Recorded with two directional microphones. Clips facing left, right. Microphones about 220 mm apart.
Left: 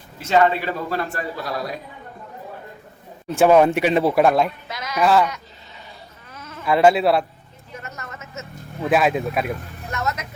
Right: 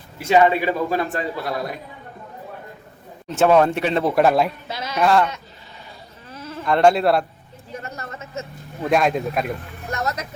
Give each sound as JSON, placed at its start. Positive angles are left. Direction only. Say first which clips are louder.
{"t": 0.2, "sound": "a man's voice", "louder": "right 2 dB", "side_deg": -15}
{"t": 3.2, "sound": "speech", "louder": "left 2 dB", "side_deg": 10}
{"t": 4.7, "sound": "bleat", "louder": "right 2 dB", "side_deg": -30}
{"t": 4.9, "sound": "speech", "louder": "even", "side_deg": 0}
{"t": 6.3, "sound": "sheep", "louder": "right 6 dB", "side_deg": -30}
{"t": 6.7, "sound": "speech", "louder": "even", "side_deg": 5}
{"t": 7.8, "sound": "a sound", "louder": "right 3 dB", "side_deg": -30}
{"t": 8.8, "sound": "speech", "louder": "even", "side_deg": 5}
{"t": 9.9, "sound": "speech", "louder": "right 1 dB", "side_deg": -35}